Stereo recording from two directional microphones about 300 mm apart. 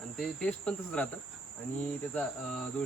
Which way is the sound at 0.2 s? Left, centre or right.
Centre.